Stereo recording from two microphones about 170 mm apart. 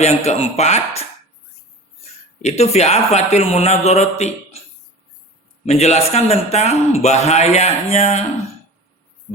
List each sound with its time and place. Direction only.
0.3 s a man's voice: 40° left (ahead or behind)
2.4 s a man's voice: 40° left (ahead or behind)
5.6 s a man's voice: 40° left (ahead or behind)